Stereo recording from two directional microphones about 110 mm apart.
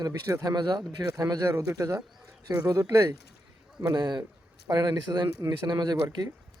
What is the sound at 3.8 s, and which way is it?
Speech, 40° right (ahead or behind).